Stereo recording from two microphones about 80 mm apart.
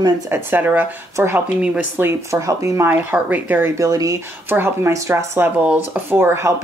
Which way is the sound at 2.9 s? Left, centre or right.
Right.